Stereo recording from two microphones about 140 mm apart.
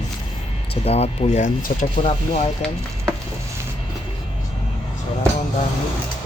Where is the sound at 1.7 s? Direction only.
75° left (ahead or behind).